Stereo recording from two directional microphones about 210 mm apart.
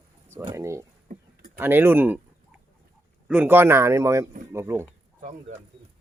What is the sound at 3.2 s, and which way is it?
Speech, 5° right (ahead or behind).